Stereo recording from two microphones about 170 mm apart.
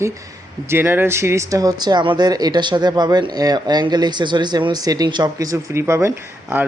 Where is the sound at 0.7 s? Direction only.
15° right (ahead or behind).